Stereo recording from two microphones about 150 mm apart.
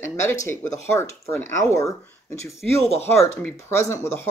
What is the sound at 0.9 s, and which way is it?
Speech, 15° left (ahead or behind).